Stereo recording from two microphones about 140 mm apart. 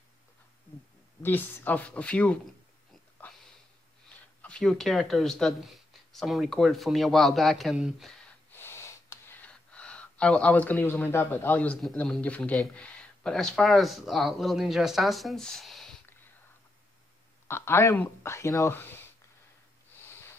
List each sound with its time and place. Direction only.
1.2 s speech: 15° left (ahead or behind)
4.4 s speech: 5° left (ahead or behind)
8.5 s gasp: 15° left (ahead or behind)
11.8 s speech: 5° left (ahead or behind)
17.5 s speech: 15° left (ahead or behind)
20.0 s snort: 15° left (ahead or behind)